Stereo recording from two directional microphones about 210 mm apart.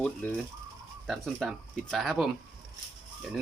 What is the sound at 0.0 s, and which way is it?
Speech, 5° left (ahead or behind).